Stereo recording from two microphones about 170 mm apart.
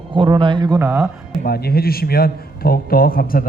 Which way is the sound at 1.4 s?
65° left (ahead or behind).